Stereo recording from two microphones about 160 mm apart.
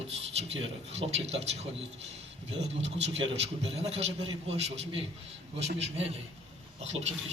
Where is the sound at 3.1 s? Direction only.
35° right (ahead or behind).